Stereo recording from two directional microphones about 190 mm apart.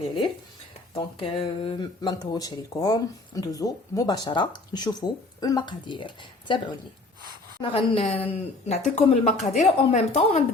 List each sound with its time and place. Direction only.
0.9 s speech: 30° left (ahead or behind)
7.6 s speech: 30° left (ahead or behind)